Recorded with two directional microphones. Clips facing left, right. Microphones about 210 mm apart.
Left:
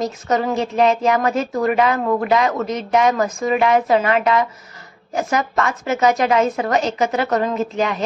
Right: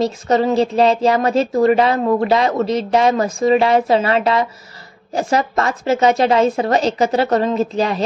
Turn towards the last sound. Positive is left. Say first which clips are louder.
# right 3 dB
turn(degrees=-35)  # may be behind; listen again after turning